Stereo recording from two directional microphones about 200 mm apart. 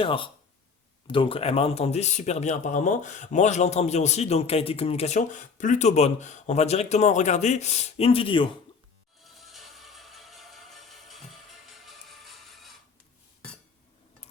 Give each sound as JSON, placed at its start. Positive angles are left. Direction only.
{"t": 0.0, "sound": "speech", "side_deg": 25}
{"t": 9.2, "sound": "music", "side_deg": 0}